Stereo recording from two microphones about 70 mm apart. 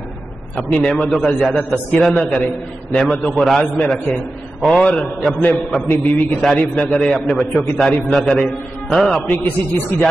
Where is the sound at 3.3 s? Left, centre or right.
Centre.